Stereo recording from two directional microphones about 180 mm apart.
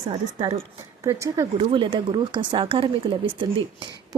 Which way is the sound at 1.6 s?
30° right (ahead or behind).